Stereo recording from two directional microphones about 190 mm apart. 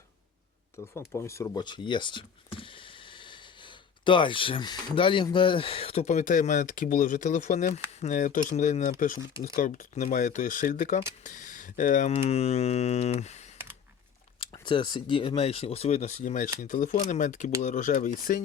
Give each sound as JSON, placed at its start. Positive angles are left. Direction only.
{"t": 0.9, "sound": "speech", "side_deg": 15}
{"t": 14.3, "sound": "speech", "side_deg": 25}